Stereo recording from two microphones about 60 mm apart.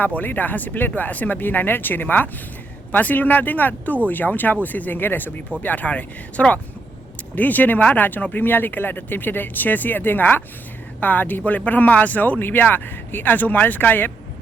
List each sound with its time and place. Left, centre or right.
0.0 s speech: left